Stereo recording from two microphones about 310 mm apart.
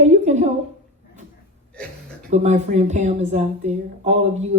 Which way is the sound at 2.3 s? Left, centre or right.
Right.